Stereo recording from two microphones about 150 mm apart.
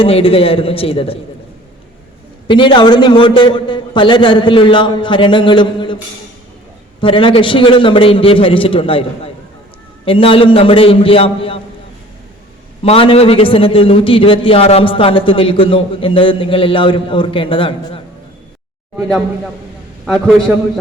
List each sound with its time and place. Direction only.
0.0 s a man's voice: 40° left (ahead or behind)
2.5 s a man's voice: 30° left (ahead or behind)
7.0 s a man's voice: 35° left (ahead or behind)
12.8 s a man's voice: 40° left (ahead or behind)
20.1 s a man's voice: centre (ahead or behind)